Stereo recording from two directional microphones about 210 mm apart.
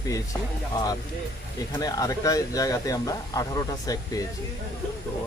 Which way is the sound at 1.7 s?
15° left (ahead or behind).